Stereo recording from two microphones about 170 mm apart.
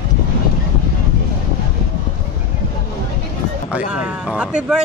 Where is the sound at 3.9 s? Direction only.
5° right (ahead or behind).